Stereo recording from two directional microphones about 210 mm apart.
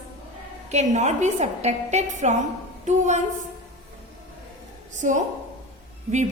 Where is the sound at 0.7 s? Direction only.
35° right (ahead or behind).